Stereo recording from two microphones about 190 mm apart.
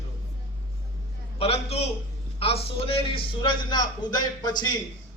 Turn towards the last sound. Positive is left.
turn(degrees=20)  # may be behind; listen again after turning